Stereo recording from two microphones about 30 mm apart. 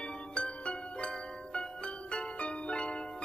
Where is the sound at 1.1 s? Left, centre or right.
Left.